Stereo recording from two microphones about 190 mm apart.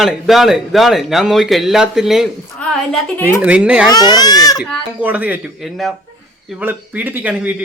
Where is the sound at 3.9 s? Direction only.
20° left (ahead or behind).